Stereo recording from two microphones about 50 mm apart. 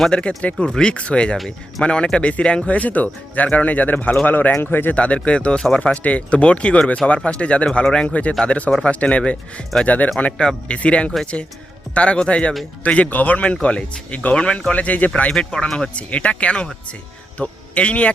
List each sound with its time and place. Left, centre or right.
0.1 s speech: left
4.9 s speech: left
5.5 s speech: centre
5.8 s speech: left
10.3 s speech: centre
15.3 s speech: centre
16.0 s speech: left